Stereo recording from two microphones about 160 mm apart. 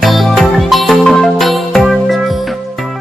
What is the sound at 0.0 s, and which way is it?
Music, centre (ahead or behind).